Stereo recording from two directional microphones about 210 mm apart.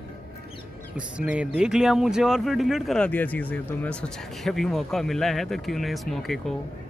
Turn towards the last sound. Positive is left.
turn(degrees=0)  # may be behind; listen again after turning